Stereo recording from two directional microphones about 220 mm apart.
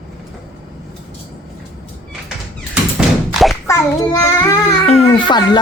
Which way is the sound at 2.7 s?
5° right (ahead or behind).